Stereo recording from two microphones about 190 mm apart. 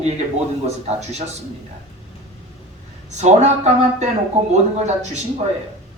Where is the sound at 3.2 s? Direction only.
35° right (ahead or behind).